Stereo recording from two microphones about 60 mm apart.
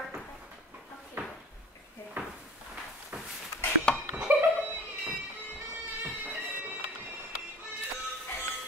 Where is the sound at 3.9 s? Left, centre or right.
Centre.